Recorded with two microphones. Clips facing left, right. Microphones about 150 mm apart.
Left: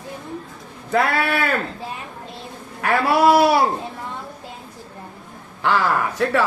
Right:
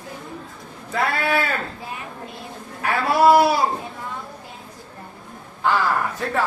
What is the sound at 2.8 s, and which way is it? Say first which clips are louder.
Speech: left 1 dB; 70° left (ahead or behind).